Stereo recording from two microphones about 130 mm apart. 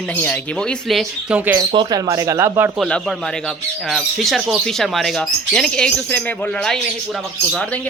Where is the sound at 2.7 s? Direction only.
Centre (ahead or behind).